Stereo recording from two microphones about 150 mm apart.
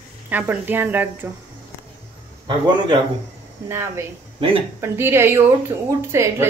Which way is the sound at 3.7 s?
20° right (ahead or behind).